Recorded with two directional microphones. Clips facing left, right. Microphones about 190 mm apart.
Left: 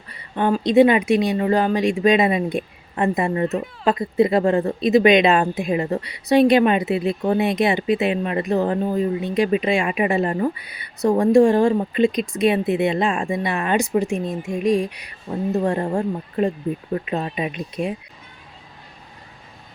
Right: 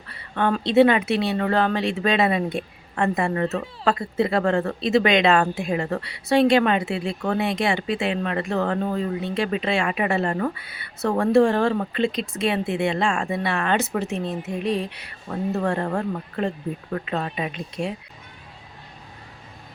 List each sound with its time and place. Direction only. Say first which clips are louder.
0.1 s speech: left 3 dB; 15° left (ahead or behind)